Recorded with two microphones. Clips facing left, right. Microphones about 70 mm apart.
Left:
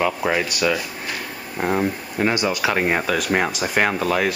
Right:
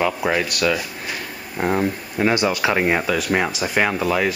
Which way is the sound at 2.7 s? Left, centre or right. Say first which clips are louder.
Even; centre.